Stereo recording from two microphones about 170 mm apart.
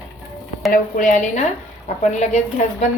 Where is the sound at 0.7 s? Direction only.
50° left (ahead or behind).